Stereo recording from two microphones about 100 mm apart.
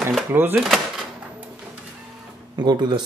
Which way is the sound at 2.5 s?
45° right (ahead or behind).